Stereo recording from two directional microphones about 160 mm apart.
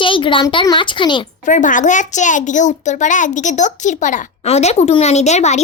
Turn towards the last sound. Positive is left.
turn(degrees=45)  # may be behind; listen again after turning